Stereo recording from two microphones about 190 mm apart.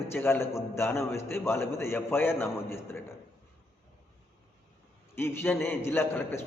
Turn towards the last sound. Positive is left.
turn(degrees=10)  # may be behind; listen again after turning